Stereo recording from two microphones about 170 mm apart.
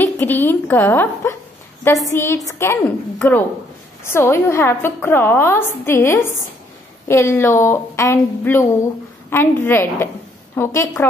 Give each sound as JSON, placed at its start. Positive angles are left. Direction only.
{"t": 0.0, "sound": "a woman's voice", "side_deg": 10}